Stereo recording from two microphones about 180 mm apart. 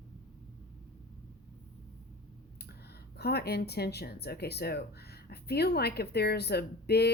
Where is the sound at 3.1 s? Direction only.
65° left (ahead or behind).